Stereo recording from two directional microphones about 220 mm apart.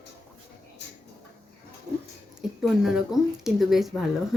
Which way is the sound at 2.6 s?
Centre (ahead or behind).